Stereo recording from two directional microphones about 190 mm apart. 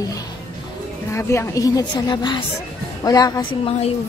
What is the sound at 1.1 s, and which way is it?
A woman's voice, 15° left (ahead or behind).